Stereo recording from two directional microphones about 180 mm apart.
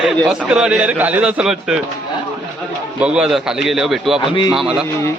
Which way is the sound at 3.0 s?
5° right (ahead or behind).